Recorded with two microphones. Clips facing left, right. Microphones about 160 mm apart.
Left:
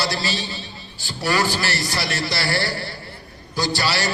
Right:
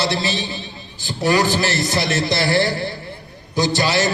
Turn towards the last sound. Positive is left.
turn(degrees=-20)  # may be behind; listen again after turning